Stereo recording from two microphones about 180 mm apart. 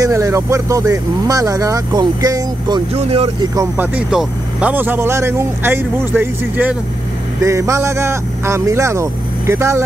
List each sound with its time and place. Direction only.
0.0 s speech: 15° right (ahead or behind)
2.9 s speech: 35° right (ahead or behind)
3.5 s speech: 10° right (ahead or behind)